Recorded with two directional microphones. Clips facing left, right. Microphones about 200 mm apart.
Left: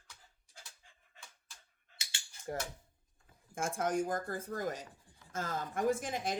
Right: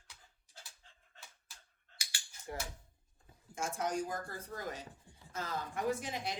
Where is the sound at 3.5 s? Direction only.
50° left (ahead or behind).